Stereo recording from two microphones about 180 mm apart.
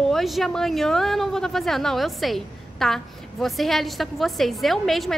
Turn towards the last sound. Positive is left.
turn(degrees=0)  # may be behind; listen again after turning